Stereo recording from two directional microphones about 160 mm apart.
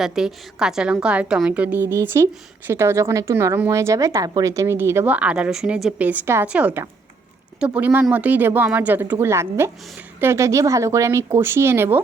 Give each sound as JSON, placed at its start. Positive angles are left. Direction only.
{"t": 0.0, "sound": "a woman's voice", "side_deg": 0}